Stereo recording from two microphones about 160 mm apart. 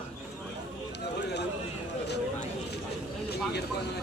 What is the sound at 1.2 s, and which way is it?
Run, 90° left.